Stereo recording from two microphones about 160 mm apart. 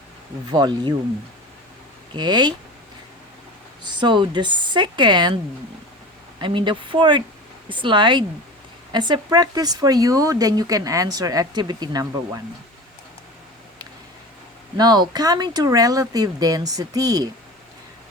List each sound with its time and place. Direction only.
0.5 s speech: 25° right (ahead or behind)
2.1 s speech: 30° right (ahead or behind)
3.8 s speech: 30° right (ahead or behind)
6.4 s speech: 30° right (ahead or behind)
14.8 s speech: 25° right (ahead or behind)